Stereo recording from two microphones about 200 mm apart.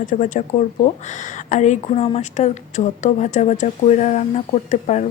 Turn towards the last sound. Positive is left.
turn(degrees=35)  # may be behind; listen again after turning